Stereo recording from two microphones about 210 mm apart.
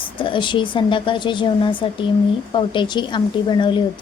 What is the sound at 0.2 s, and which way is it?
A woman's voice, 25° left (ahead or behind).